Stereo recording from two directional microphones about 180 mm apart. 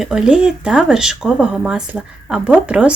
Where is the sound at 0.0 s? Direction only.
5° right (ahead or behind).